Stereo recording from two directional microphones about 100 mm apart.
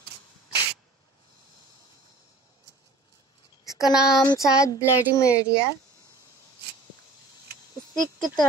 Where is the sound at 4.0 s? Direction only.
5° right (ahead or behind).